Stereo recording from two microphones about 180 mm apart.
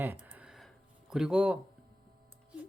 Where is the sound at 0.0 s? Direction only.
10° right (ahead or behind).